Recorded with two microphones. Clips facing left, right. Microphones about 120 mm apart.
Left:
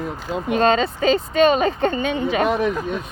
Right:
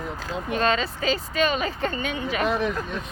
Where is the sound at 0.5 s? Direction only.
35° left (ahead or behind).